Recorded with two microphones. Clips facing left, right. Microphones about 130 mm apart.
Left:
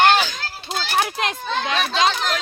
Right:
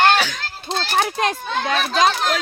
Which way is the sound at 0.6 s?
5° left (ahead or behind).